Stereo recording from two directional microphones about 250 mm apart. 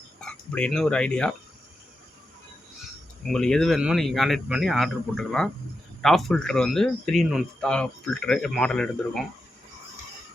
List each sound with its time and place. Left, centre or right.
0.2 s speech: centre
3.2 s speech: centre